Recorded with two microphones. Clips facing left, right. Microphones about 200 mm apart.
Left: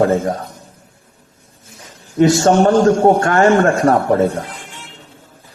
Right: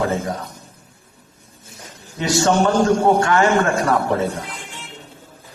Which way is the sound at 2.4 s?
45° left (ahead or behind).